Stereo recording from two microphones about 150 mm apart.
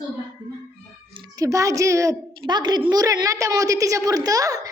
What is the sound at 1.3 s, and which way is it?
A woman's voice, 20° right (ahead or behind).